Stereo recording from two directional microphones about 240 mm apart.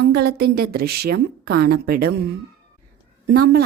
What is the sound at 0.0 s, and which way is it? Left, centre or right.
A woman's voice, right.